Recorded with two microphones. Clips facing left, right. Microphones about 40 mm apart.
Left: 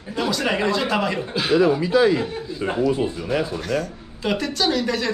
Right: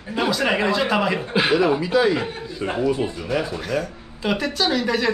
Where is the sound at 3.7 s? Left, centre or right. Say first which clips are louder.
Even; centre.